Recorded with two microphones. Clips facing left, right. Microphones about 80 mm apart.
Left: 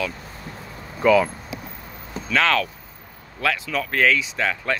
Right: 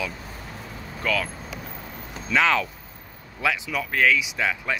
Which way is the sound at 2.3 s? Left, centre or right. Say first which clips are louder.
Left 1 dB; centre.